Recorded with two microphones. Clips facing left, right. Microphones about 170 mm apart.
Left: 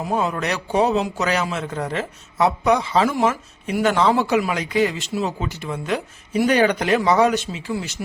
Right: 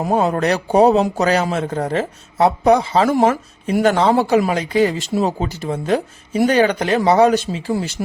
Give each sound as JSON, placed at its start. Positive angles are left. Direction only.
{"t": 0.0, "sound": "a man's voice", "side_deg": -40}
{"t": 3.1, "sound": "speech", "side_deg": -50}
{"t": 3.7, "sound": "a man's voice", "side_deg": -35}